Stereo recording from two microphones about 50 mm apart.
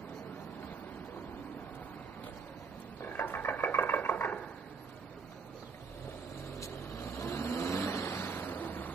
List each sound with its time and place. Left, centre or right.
3.1 s a sound: left
7.0 s vehicle: left
8.2 s waves: left